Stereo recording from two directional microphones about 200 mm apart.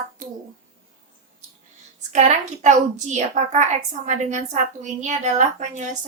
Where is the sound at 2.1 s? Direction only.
35° right (ahead or behind).